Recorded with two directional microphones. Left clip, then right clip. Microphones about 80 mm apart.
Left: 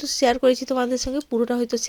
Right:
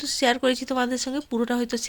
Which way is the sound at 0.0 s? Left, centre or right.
Left.